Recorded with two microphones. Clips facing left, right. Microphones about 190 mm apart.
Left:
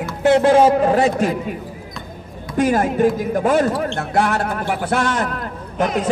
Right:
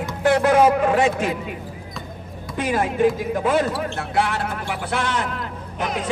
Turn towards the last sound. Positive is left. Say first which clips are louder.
# left 6 dB
turn(degrees=45)  # may be behind; listen again after turning